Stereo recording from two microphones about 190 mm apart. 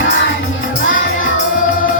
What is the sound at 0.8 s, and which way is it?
Music, 90° left.